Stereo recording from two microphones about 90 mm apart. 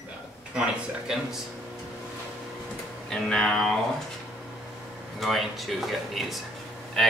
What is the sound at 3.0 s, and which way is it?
Speech, 5° left (ahead or behind).